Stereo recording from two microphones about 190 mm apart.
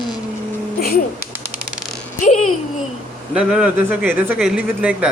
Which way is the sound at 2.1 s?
40° left (ahead or behind).